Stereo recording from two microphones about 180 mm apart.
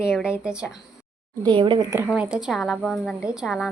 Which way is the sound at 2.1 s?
5° right (ahead or behind).